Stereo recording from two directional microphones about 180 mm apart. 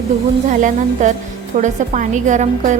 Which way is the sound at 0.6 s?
45° right (ahead or behind).